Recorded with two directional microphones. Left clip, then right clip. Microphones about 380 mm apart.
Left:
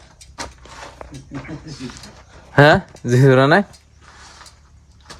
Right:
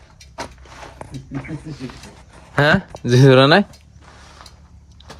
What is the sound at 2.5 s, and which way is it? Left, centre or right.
Speech, left.